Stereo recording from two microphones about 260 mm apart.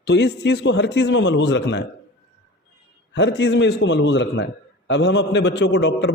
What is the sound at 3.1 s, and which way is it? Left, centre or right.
A man's voice, left.